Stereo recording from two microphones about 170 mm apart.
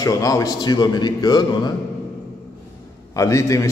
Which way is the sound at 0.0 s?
20° left (ahead or behind).